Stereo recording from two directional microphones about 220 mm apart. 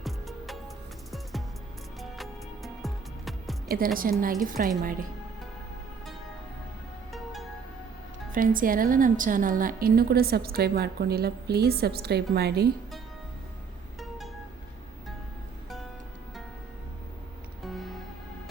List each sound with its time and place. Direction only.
0.0 s music: centre (ahead or behind)
2.0 s music: centre (ahead or behind)
3.7 s a woman's voice: 40° right (ahead or behind)
8.3 s a woman's voice: 40° right (ahead or behind)
17.6 s music: centre (ahead or behind)